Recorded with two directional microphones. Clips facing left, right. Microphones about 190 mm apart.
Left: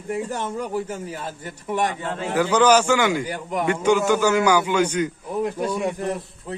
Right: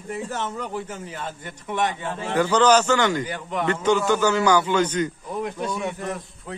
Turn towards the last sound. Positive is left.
turn(degrees=35)  # may be behind; listen again after turning